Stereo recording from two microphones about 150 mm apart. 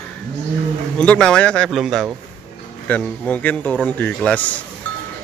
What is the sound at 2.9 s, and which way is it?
Speech, 10° left (ahead or behind).